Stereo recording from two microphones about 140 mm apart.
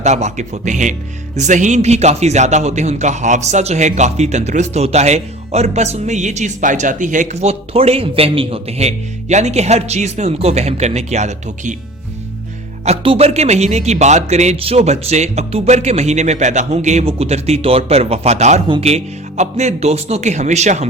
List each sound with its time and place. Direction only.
0.0 s a man's voice: 55° right (ahead or behind)
12.8 s a man's voice: 45° right (ahead or behind)